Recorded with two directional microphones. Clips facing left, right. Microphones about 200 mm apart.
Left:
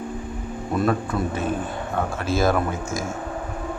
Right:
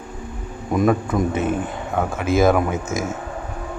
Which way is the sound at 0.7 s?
15° right (ahead or behind).